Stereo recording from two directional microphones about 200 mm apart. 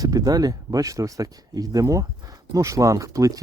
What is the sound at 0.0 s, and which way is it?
Speech, 20° right (ahead or behind).